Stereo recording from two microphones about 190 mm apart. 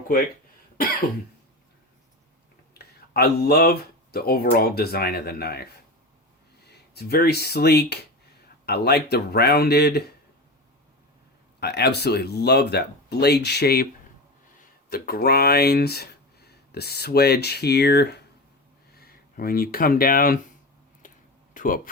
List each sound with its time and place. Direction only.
2.7 s speech: 55° left (ahead or behind)
6.7 s speech: 60° left (ahead or behind)
11.6 s speech: 60° left (ahead or behind)
21.0 s a sound: 45° left (ahead or behind)